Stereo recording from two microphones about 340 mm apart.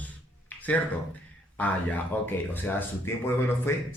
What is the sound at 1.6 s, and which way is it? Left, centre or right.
A man's voice, centre.